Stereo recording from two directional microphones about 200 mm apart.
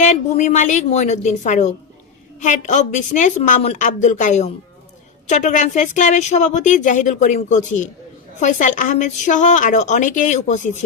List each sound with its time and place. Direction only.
0.0 s speech: 35° left (ahead or behind)